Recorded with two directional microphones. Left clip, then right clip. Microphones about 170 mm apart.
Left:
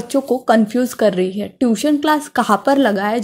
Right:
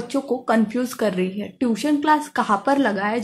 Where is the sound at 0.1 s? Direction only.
30° left (ahead or behind).